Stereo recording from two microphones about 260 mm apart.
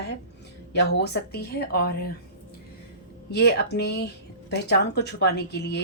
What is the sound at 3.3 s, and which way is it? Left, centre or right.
Speech, left.